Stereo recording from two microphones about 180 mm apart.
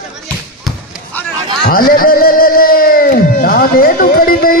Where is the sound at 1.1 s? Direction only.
10° left (ahead or behind).